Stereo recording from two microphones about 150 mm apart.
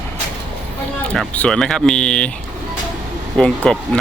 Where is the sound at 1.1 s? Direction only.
5° left (ahead or behind).